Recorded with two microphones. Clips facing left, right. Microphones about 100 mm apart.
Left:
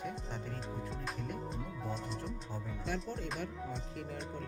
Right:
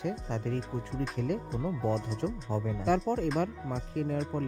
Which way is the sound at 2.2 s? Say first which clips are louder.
Right 10 dB; 90° right.